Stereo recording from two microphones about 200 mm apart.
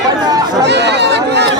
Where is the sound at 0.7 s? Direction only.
60° right (ahead or behind).